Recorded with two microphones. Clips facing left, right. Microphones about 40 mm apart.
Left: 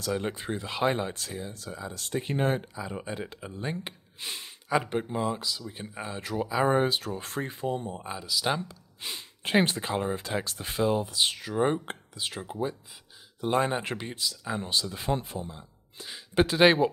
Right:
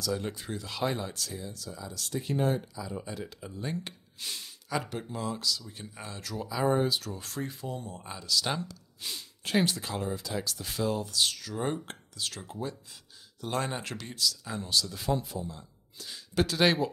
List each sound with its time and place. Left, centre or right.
0.0 s speech: left